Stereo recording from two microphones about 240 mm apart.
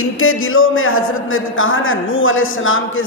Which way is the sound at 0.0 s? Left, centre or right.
Left.